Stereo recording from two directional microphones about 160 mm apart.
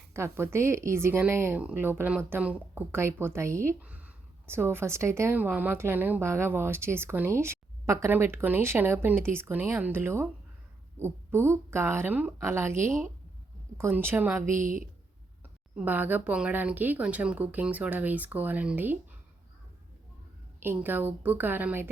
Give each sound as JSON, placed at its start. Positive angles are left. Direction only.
{"t": 0.1, "sound": "speech", "side_deg": -15}
{"t": 14.6, "sound": "speech", "side_deg": -55}
{"t": 15.7, "sound": "speech", "side_deg": -10}
{"t": 20.6, "sound": "speech", "side_deg": -15}